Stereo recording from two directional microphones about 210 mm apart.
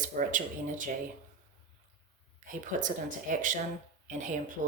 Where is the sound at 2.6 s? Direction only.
40° right (ahead or behind).